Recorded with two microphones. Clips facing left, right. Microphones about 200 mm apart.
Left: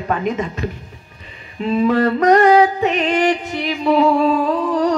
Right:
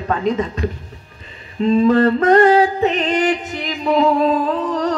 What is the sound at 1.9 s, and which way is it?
Speech, 30° right (ahead or behind).